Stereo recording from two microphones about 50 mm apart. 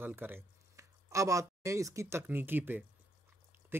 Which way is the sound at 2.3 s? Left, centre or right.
Right.